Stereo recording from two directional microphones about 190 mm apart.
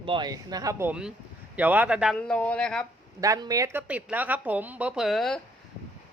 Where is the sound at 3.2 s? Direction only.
20° right (ahead or behind); by 5.4 s centre (ahead or behind).